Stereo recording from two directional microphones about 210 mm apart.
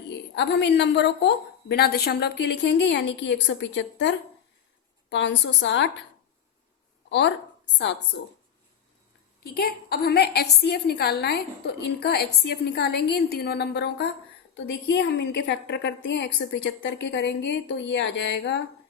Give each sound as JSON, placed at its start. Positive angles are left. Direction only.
{"t": 0.3, "sound": "a woman's voice", "side_deg": 55}
{"t": 7.8, "sound": "a woman's voice", "side_deg": 60}
{"t": 9.4, "sound": "a woman's voice", "side_deg": 45}